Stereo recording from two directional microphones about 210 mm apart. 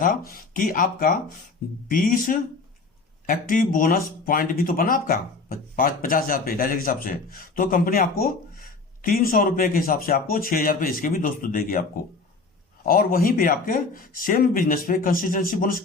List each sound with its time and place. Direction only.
0.0 s speech: 40° left (ahead or behind)